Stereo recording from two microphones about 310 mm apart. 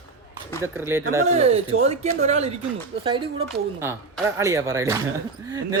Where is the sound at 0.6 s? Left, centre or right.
Centre.